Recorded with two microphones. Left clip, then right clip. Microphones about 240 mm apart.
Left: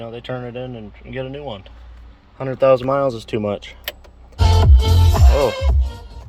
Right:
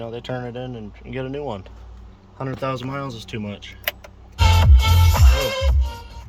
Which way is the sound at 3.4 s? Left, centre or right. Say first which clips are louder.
Left 11 dB; centre.